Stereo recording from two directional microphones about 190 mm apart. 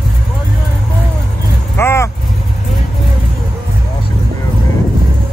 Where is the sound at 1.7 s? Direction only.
15° left (ahead or behind).